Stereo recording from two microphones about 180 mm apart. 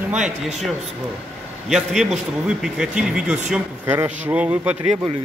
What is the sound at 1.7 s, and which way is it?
A man's voice, centre (ahead or behind).